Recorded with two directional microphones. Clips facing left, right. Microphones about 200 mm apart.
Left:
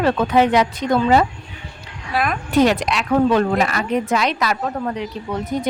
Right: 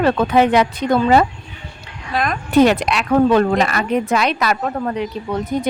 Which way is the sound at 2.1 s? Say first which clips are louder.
Even; 5° left (ahead or behind).